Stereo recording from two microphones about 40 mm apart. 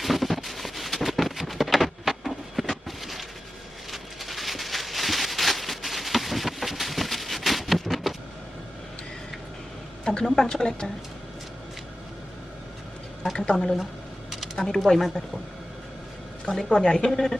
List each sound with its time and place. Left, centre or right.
0.0 s a sound: centre
10.1 s speech: centre
13.3 s a woman's voice: left
14.5 s speech: centre
16.6 s a woman's voice: left
17.1 s speech: centre